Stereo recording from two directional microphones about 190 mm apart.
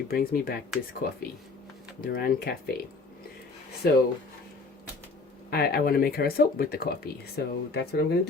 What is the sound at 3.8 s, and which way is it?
Speech, 55° left (ahead or behind).